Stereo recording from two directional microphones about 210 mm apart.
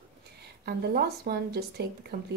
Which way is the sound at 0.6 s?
50° right (ahead or behind).